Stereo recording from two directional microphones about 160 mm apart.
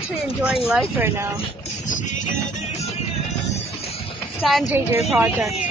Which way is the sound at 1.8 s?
50° left (ahead or behind).